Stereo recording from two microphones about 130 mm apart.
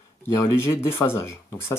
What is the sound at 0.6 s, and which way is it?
Speech, 20° left (ahead or behind).